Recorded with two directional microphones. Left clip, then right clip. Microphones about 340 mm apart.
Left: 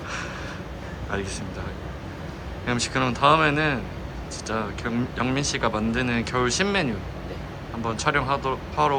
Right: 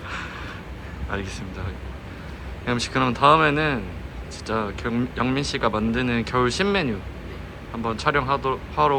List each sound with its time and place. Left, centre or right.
2.6 s speech: centre